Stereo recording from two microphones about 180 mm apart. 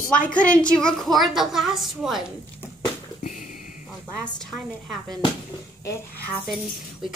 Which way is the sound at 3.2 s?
50° left (ahead or behind).